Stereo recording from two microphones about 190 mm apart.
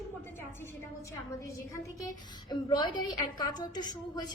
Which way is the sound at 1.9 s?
20° left (ahead or behind).